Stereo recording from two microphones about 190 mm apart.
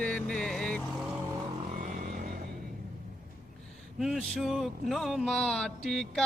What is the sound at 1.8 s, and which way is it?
Vehicle, 50° right (ahead or behind).